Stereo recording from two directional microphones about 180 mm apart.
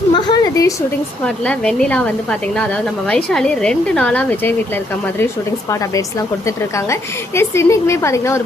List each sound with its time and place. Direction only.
0.1 s a sound: 20° left (ahead or behind)
1.2 s speech: 5° left (ahead or behind)
3.1 s speech: 5° left (ahead or behind)
6.7 s a woman's voice: 15° left (ahead or behind)